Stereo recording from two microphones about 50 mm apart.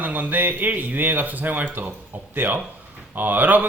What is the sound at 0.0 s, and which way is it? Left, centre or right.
A man's voice, right.